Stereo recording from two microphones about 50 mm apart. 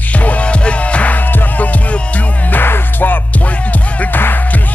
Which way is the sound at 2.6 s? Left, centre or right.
Left.